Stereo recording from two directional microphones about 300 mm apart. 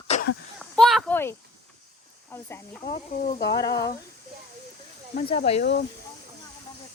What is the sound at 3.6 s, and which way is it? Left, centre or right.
Speech, centre.